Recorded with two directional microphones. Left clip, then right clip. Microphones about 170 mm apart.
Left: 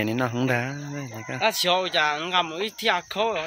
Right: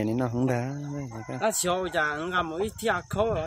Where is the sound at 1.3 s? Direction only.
90° right.